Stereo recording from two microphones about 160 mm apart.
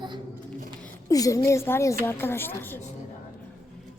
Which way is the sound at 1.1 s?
20° left (ahead or behind).